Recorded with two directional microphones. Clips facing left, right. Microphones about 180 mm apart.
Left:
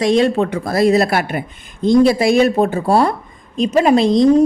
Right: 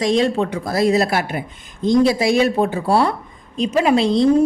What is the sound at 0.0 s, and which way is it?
A woman's voice, 60° left (ahead or behind).